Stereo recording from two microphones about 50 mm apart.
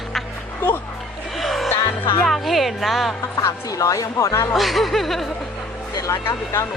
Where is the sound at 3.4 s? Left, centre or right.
Left.